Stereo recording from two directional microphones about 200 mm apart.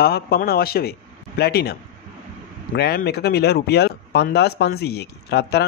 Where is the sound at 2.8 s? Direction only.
55° left (ahead or behind).